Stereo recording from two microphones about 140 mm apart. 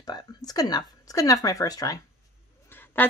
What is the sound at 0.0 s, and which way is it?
Speech, 30° left (ahead or behind).